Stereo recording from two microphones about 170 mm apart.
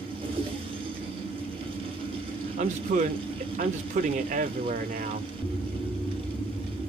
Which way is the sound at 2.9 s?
50° right (ahead or behind).